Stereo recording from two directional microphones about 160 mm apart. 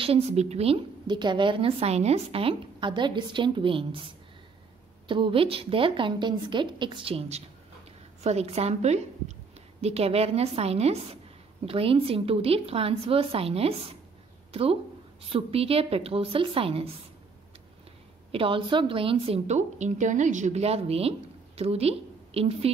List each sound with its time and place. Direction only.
0.0 s a woman's voice: 40° right (ahead or behind)
5.0 s a woman's voice: 30° right (ahead or behind)
18.3 s a woman's voice: 35° right (ahead or behind)